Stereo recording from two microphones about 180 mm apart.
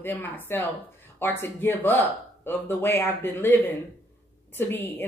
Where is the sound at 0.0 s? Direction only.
10° left (ahead or behind).